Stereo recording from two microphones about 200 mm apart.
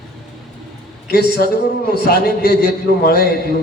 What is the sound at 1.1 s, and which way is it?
Speech, 50° left (ahead or behind).